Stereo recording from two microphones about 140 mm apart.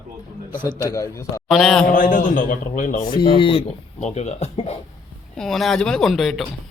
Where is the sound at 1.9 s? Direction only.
75° left (ahead or behind).